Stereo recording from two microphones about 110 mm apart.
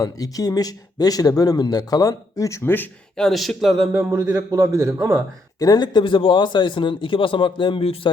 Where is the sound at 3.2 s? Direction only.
Centre (ahead or behind).